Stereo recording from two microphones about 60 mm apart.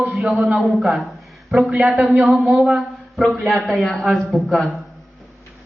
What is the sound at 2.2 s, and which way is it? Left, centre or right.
A man's voice, centre.